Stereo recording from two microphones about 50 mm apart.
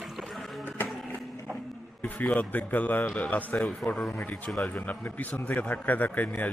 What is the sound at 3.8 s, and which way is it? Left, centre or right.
Speech, centre.